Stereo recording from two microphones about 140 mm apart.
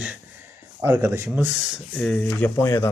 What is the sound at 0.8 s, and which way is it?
Speech, 20° right (ahead or behind).